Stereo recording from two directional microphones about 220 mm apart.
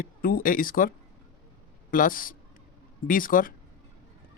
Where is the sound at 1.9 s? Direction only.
40° left (ahead or behind).